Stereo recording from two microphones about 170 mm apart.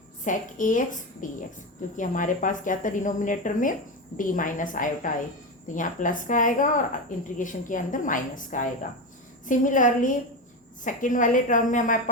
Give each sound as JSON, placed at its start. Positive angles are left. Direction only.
{"t": 0.3, "sound": "a woman's voice", "side_deg": 50}